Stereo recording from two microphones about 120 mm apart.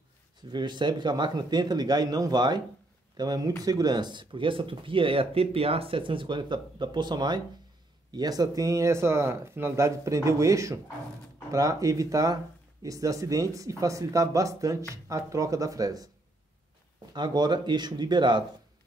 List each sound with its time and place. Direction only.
0.5 s speech: 40° right (ahead or behind)
17.1 s speech: 35° right (ahead or behind)